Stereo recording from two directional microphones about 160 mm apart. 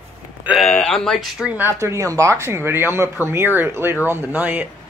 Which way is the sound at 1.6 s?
20° right (ahead or behind).